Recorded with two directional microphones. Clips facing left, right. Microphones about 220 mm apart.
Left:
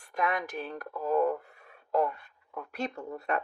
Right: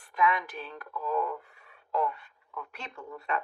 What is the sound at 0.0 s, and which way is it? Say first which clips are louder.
Speech: right 2 dB; 45° left (ahead or behind).